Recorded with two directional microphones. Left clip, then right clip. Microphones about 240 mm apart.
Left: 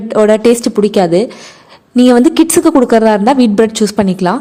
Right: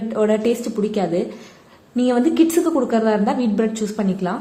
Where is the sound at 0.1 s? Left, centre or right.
Left.